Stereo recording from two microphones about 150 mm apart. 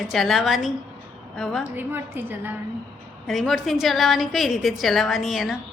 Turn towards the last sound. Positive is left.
turn(degrees=0)  # may be behind; listen again after turning